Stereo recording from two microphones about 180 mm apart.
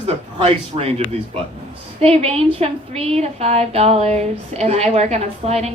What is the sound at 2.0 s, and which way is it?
A woman's voice, 35° right (ahead or behind).